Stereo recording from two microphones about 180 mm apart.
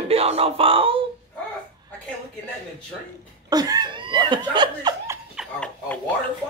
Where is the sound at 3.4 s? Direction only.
20° right (ahead or behind).